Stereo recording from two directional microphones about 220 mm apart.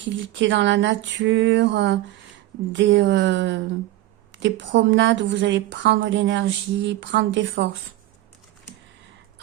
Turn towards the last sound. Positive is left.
turn(degrees=-55)  # may be behind; listen again after turning